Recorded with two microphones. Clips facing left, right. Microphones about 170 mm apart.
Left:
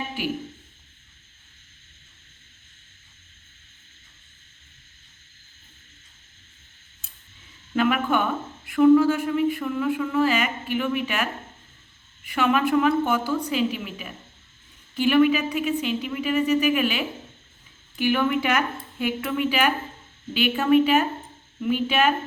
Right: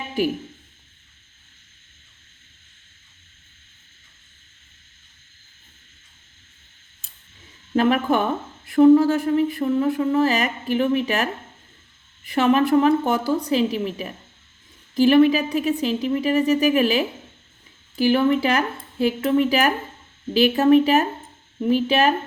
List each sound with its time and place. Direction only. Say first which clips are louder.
7.8 s speech: right 3 dB; 40° right (ahead or behind)